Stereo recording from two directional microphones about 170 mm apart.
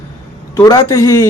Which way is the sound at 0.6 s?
20° left (ahead or behind).